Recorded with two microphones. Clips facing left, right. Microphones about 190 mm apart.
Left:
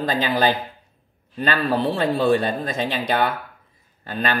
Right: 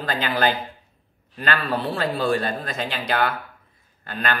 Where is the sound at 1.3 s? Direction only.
20° left (ahead or behind).